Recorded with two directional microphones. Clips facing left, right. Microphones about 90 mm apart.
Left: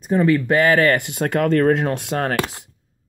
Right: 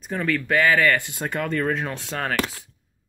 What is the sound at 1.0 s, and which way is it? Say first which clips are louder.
Speech: left 8 dB; 90° left.